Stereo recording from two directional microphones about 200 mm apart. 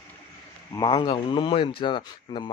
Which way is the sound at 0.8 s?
25° left (ahead or behind).